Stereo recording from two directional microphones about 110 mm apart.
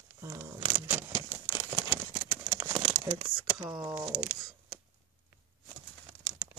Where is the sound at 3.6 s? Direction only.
35° right (ahead or behind).